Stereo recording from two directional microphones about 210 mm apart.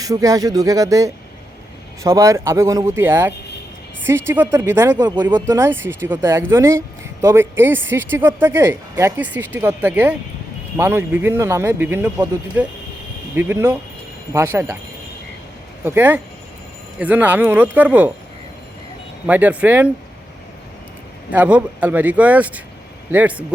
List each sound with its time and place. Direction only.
0.0 s speech: 15° right (ahead or behind)
15.8 s speech: 10° right (ahead or behind)
19.2 s speech: 5° right (ahead or behind)
21.3 s speech: 5° right (ahead or behind)